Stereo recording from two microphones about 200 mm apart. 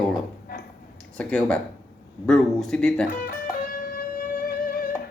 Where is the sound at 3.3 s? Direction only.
45° left (ahead or behind).